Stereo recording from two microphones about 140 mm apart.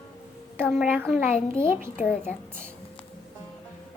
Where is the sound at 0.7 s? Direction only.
10° right (ahead or behind).